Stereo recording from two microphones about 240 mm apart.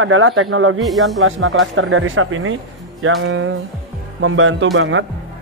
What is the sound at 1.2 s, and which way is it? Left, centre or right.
Speech, right.